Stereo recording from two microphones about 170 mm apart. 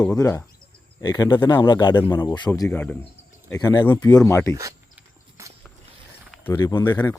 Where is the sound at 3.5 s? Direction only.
20° left (ahead or behind).